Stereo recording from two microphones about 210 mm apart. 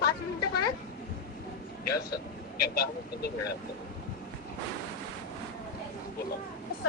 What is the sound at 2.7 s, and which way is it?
Speech, 50° left (ahead or behind).